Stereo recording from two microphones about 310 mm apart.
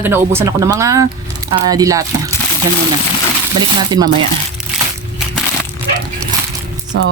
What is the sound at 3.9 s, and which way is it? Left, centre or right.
Speech, centre.